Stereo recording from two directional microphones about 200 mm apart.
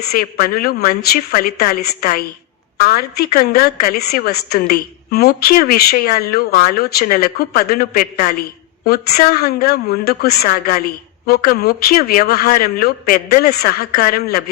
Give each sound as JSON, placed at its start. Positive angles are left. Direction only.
{"t": 0.1, "sound": "a woman's voice", "side_deg": 45}